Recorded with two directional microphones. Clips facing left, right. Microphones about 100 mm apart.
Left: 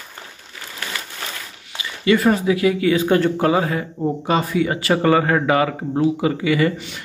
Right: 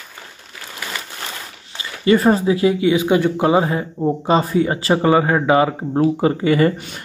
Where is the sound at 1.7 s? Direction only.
35° right (ahead or behind); by 3.5 s 15° right (ahead or behind).